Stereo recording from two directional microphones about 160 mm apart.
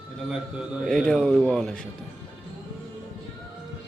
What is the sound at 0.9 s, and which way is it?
Speech, 5° left (ahead or behind).